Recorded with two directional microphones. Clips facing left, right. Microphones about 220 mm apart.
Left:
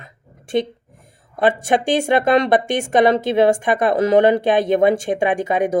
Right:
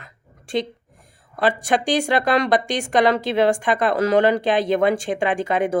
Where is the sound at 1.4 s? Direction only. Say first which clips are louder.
Left 3 dB; 20° left (ahead or behind).